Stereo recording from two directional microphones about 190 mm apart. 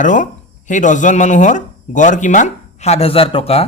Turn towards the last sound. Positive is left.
turn(degrees=30)  # may be behind; listen again after turning